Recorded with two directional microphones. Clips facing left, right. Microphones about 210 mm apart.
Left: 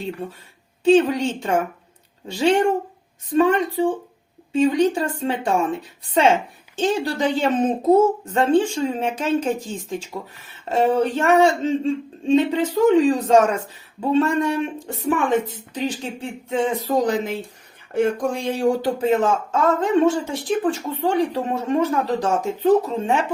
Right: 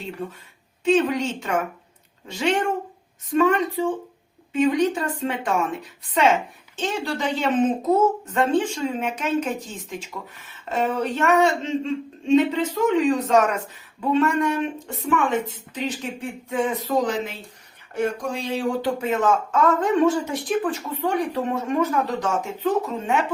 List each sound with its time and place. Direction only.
0.9 s a woman's voice: 35° left (ahead or behind)
6.7 s a woman's voice: 35° left (ahead or behind)
10.7 s a woman's voice: 30° left (ahead or behind)
15.7 s a woman's voice: 30° left (ahead or behind)